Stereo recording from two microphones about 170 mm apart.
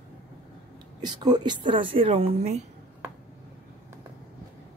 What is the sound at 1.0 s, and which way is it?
A woman's voice, 25° right (ahead or behind).